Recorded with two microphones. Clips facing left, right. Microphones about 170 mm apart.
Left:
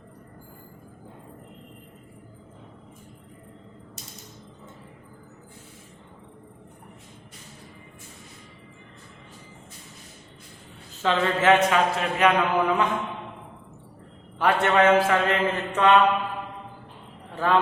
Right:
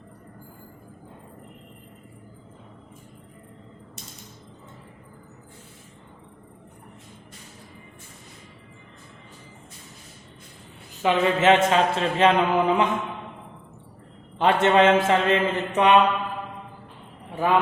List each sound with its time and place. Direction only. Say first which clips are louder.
10.9 s a man's voice: right 2 dB; 15° right (ahead or behind)
11.7 s mantra: right 2 dB; 25° right (ahead or behind)
14.3 s mantra: right 2 dB; 20° right (ahead or behind)
17.3 s a man's voice: right 1 dB; 15° right (ahead or behind)